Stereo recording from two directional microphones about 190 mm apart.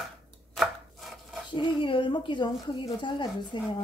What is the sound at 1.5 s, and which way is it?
A woman's voice, 25° left (ahead or behind).